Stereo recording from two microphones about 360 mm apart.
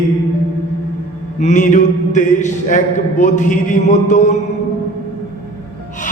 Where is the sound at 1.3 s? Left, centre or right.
Centre.